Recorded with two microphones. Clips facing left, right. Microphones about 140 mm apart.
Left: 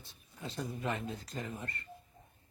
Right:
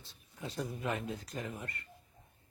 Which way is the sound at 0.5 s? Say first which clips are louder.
Even; centre (ahead or behind).